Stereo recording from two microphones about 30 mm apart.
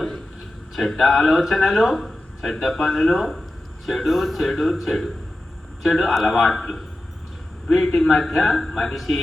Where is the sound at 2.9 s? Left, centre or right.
Centre.